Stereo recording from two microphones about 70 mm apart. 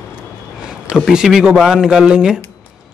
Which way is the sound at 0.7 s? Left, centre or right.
Centre.